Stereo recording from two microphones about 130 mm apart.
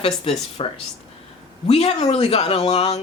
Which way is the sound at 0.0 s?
50° left (ahead or behind).